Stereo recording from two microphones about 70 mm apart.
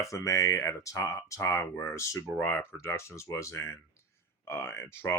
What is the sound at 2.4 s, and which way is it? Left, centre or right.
Speech, left.